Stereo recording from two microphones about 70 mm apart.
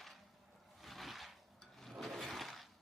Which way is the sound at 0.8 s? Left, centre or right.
Centre.